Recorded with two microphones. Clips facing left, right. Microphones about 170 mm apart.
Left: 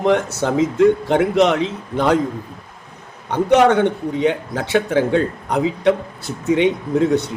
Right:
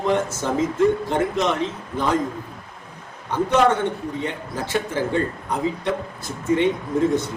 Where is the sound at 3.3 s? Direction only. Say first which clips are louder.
Left 5 dB; 70° left (ahead or behind).